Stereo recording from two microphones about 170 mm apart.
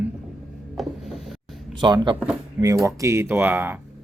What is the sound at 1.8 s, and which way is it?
Speech, 25° right (ahead or behind).